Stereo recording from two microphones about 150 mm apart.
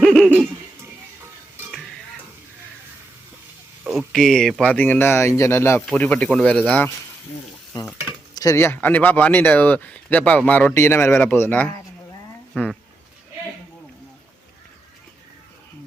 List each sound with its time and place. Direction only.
0.0 s hoot: 5° left (ahead or behind)
3.8 s speech: centre (ahead or behind)
8.4 s speech: 20° left (ahead or behind)